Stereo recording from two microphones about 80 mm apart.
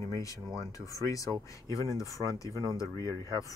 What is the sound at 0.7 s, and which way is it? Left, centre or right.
Speech, left.